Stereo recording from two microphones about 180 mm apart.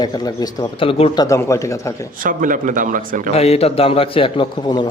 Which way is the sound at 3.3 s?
35° left (ahead or behind).